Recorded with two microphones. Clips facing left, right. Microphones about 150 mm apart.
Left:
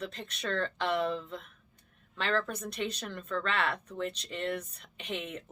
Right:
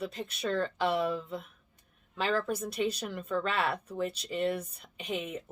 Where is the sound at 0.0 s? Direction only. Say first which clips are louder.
Right 3 dB; 10° right (ahead or behind).